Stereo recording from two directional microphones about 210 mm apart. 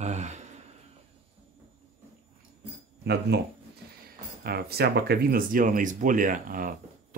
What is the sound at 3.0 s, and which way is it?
Speech, 50° right (ahead or behind).